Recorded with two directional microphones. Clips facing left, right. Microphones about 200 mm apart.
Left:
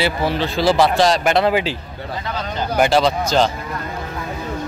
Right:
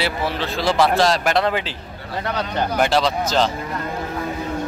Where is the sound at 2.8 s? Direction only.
Centre (ahead or behind).